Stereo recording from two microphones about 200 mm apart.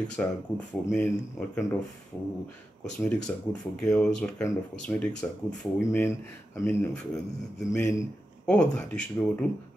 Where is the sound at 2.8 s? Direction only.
5° left (ahead or behind).